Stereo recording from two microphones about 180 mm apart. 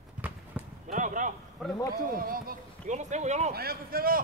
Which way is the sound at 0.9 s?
45° right (ahead or behind).